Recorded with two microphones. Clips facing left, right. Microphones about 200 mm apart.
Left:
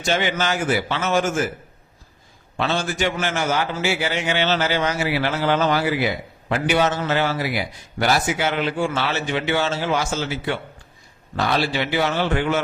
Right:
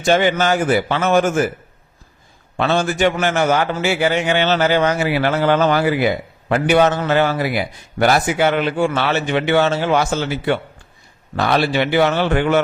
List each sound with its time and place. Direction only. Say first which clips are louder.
0.0 s a man's voice: right 7 dB; 50° right (ahead or behind)
2.6 s a man's voice: right 6 dB; 60° right (ahead or behind)